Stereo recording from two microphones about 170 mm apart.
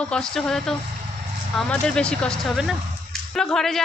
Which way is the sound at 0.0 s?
5° left (ahead or behind).